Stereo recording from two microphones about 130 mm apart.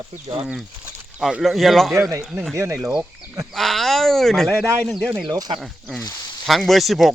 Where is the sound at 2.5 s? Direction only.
20° right (ahead or behind).